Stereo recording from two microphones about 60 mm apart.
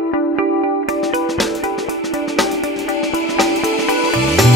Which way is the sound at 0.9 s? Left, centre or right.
Centre.